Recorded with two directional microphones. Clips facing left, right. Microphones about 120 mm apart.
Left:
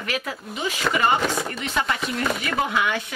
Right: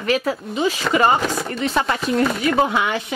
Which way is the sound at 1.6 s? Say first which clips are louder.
Right 8 dB; 35° right (ahead or behind).